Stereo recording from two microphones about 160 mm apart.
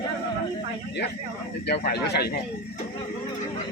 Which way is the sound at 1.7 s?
85° left.